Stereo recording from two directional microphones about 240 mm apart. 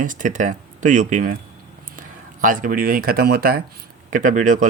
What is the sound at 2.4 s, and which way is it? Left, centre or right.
Speech, right.